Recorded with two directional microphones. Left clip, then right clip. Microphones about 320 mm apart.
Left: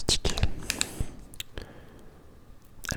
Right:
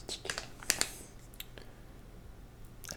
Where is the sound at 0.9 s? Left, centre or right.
Left.